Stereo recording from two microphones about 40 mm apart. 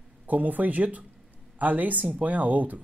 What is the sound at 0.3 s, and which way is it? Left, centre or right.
Speech, right.